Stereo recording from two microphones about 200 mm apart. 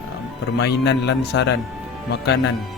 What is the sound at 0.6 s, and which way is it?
Speech, 60° left (ahead or behind).